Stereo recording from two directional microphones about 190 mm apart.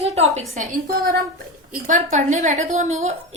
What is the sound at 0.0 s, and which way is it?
A woman's voice, 35° right (ahead or behind).